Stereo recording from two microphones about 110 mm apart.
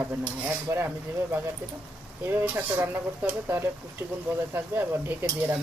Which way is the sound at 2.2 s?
20° right (ahead or behind).